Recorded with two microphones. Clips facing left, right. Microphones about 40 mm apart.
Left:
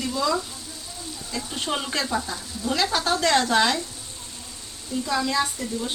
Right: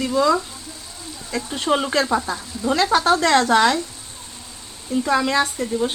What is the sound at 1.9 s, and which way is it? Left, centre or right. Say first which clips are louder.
Speech: right 7 dB; right.